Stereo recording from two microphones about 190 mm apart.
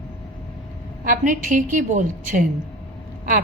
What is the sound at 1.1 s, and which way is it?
A woman's voice, 45° right (ahead or behind).